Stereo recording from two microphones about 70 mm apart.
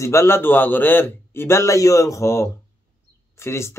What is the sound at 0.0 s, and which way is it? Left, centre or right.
Speech, left.